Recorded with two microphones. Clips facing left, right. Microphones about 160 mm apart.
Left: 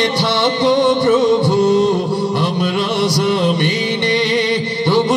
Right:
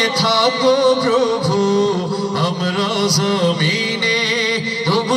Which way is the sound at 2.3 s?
20° left (ahead or behind).